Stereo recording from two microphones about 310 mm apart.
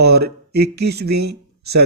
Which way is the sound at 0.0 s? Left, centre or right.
Right.